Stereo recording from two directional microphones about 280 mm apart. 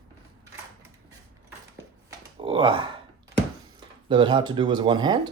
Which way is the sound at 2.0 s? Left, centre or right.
Centre.